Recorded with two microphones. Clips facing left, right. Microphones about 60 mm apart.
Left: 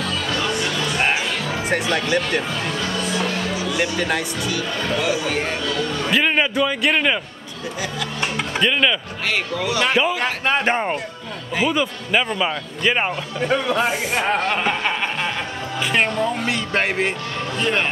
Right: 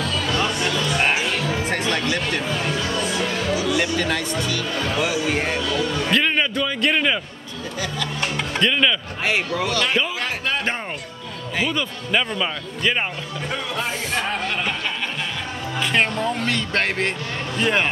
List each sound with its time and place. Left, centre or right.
1.7 s speech: centre
3.7 s speech: centre
5.0 s speech: centre
6.0 s speech: centre
10.0 s a sound: left
11.5 s speech: centre
13.5 s music: left
15.8 s speech: centre
17.6 s speech: centre